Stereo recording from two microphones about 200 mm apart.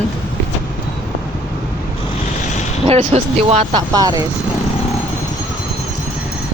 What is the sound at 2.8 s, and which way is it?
Speech, 35° right (ahead or behind).